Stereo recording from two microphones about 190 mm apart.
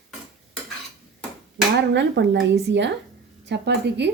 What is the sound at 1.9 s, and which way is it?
Speech, 70° right (ahead or behind).